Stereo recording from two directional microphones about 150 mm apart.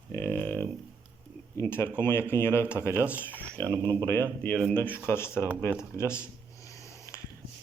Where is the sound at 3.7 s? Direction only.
30° right (ahead or behind).